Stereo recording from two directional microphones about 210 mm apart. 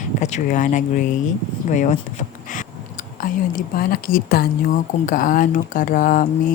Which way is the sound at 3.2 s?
40° left (ahead or behind).